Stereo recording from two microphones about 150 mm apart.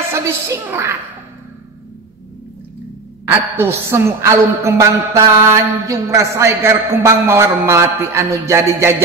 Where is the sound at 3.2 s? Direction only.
15° right (ahead or behind).